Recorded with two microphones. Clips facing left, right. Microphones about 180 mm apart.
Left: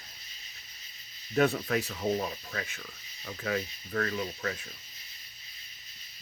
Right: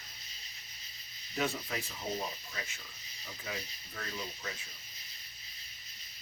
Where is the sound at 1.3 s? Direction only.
65° left (ahead or behind).